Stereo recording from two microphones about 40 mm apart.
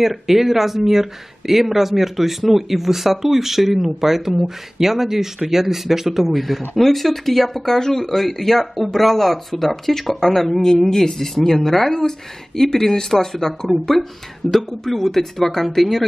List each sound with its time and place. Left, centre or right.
0.0 s speech: centre